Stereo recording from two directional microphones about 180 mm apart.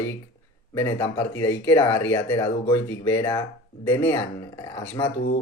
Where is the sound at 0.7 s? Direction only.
10° left (ahead or behind).